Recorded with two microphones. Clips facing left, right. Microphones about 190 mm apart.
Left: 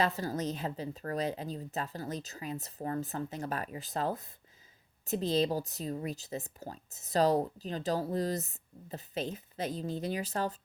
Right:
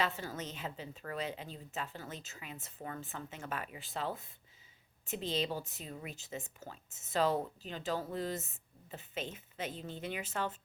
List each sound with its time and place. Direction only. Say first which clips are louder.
0.0 s speech: left 6 dB; 40° left (ahead or behind)